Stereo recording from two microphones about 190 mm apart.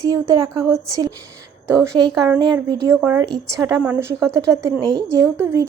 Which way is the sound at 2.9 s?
5° right (ahead or behind).